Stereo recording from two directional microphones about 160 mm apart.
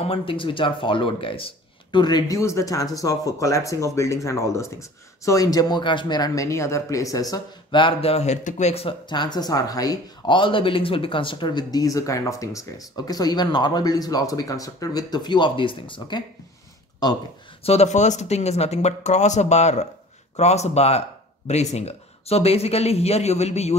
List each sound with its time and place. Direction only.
0.0 s speech: 35° left (ahead or behind)
17.6 s speech: 45° left (ahead or behind)